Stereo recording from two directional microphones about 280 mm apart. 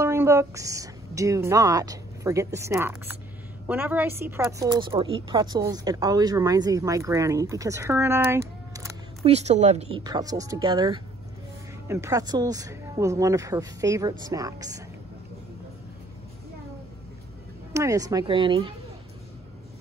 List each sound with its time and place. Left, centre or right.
0.0 s a woman's voice: centre
9.2 s a woman's voice: right
17.7 s a woman's voice: centre